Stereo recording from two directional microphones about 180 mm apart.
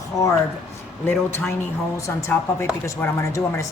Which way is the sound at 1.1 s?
10° left (ahead or behind).